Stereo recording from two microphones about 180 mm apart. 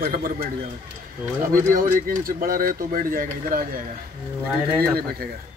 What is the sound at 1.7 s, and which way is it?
Speech, 50° right (ahead or behind).